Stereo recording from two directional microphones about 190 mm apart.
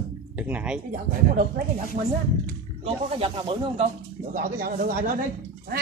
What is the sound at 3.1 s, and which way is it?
Speech, 30° right (ahead or behind).